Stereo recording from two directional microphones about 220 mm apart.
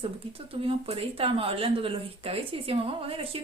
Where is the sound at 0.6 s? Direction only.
25° right (ahead or behind).